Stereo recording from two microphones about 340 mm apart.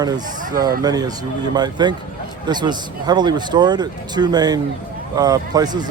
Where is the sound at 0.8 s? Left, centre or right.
Centre.